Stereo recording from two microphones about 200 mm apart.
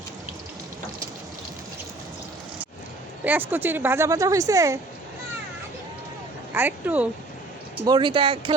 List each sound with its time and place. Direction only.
3.2 s speech: 10° right (ahead or behind)
6.5 s speech: 10° right (ahead or behind)
7.9 s speech: 25° right (ahead or behind)